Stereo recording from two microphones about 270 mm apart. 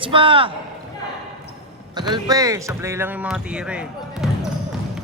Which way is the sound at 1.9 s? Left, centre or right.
Centre.